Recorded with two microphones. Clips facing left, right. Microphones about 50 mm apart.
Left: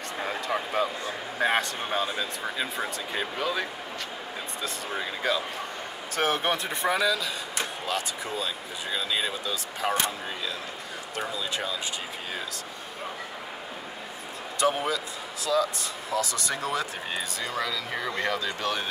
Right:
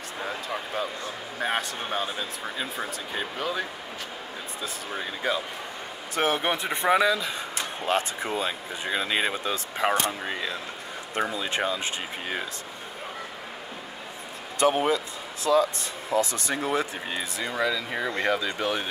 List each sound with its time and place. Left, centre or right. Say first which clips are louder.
0.3 s a sound: left 4 dB; centre
1.4 s speech: left 3 dB; centre
6.1 s speech: right 1 dB; right
14.6 s speech: right 3 dB; right
17.1 s speech: right 1 dB; centre